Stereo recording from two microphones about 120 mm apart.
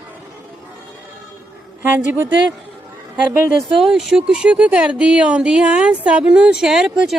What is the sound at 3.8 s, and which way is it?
Speech, centre (ahead or behind).